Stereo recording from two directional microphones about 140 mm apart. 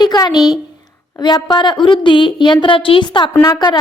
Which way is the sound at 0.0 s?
30° left (ahead or behind).